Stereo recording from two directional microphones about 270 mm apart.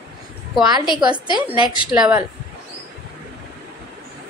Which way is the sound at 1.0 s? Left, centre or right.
Centre.